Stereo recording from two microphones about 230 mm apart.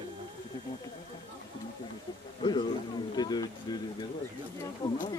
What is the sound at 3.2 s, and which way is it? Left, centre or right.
Speech, centre.